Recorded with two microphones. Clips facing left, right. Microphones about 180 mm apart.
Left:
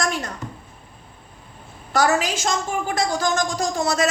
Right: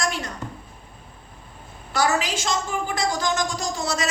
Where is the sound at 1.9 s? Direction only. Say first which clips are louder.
Left 3 dB; 45° left (ahead or behind).